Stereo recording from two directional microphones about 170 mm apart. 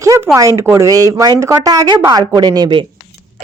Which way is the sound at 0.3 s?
20° right (ahead or behind).